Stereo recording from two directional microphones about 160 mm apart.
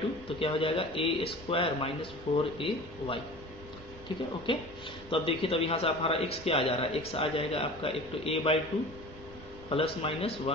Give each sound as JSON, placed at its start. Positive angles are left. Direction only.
{"t": 0.4, "sound": "a man's voice", "side_deg": 35}
{"t": 4.5, "sound": "a man's voice", "side_deg": 30}
{"t": 9.7, "sound": "a man's voice", "side_deg": 35}